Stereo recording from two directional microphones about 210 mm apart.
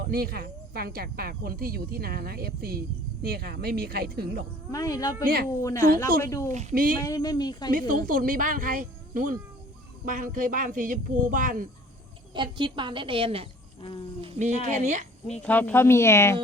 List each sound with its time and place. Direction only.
0.0 s speech: 45° right (ahead or behind)
4.7 s speech: 15° left (ahead or behind)
5.2 s speech: 45° right (ahead or behind)
5.6 s speech: 15° left (ahead or behind)
6.5 s speech: 35° right (ahead or behind)
7.0 s speech: 15° left (ahead or behind)
7.7 s speech: 40° right (ahead or behind)
12.3 s a woman's voice: 20° right (ahead or behind)
15.4 s speech: 10° left (ahead or behind)